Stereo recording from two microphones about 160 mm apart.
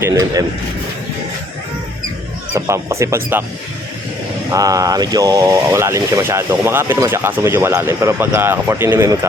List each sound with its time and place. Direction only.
0.0 s a man's voice: 20° right (ahead or behind)
2.6 s speech: 20° right (ahead or behind)
4.5 s speech: 20° right (ahead or behind)